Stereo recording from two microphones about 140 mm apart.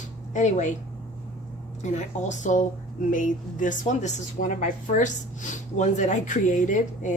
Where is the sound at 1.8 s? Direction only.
60° left (ahead or behind).